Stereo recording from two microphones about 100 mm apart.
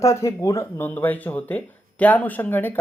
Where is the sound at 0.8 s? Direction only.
20° left (ahead or behind).